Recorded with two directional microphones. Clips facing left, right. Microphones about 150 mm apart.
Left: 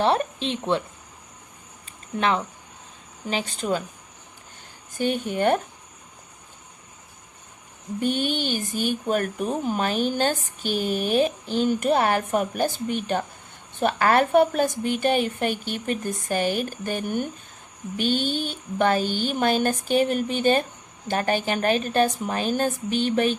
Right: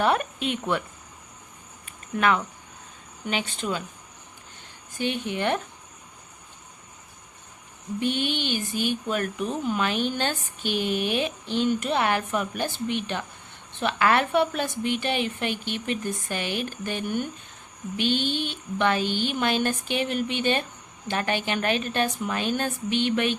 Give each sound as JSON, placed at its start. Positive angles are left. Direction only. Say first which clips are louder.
{"t": 0.0, "sound": "speech", "louder": "left 2 dB", "side_deg": 30}
{"t": 1.8, "sound": "a sound", "louder": "even", "side_deg": 30}
{"t": 3.2, "sound": "speech", "louder": "left 3 dB", "side_deg": 35}
{"t": 4.9, "sound": "a woman's voice", "louder": "left 4 dB", "side_deg": 45}
{"t": 7.9, "sound": "a woman's voice", "louder": "left 2 dB", "side_deg": 45}